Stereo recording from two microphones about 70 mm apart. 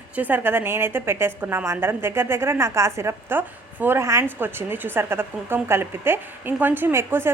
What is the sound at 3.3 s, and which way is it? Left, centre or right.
A woman's voice, right.